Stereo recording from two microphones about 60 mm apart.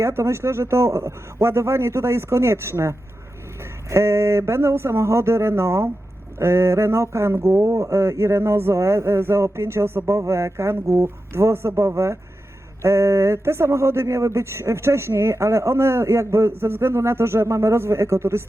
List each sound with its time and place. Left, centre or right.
0.0 s speech: right